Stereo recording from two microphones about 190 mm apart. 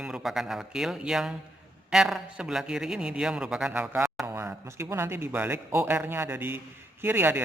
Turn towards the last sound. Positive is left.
turn(degrees=-10)  # may be behind; listen again after turning